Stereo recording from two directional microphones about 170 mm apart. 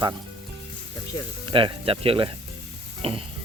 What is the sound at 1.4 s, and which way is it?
Speech, 30° right (ahead or behind).